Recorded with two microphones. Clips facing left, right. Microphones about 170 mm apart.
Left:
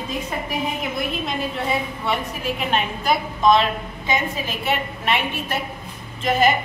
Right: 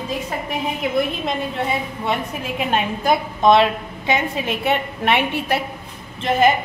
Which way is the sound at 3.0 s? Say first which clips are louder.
Right 2 dB; 60° right (ahead or behind).